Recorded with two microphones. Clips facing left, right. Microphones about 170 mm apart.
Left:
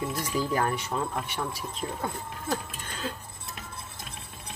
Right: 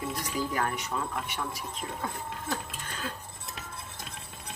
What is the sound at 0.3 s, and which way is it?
Speech, 30° left (ahead or behind).